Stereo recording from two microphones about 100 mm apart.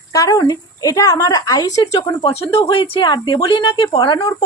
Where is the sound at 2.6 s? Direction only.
55° left (ahead or behind).